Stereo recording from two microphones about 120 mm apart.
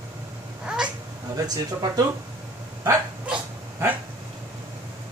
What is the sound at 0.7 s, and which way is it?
Cat, 10° right (ahead or behind).